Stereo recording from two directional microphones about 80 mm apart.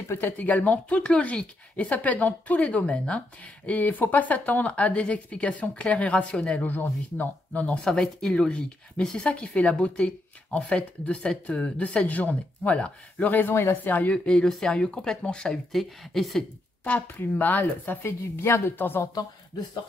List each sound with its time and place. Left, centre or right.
0.1 s speech: left
14.1 s speech: centre
16.8 s speech: centre
18.0 s speech: left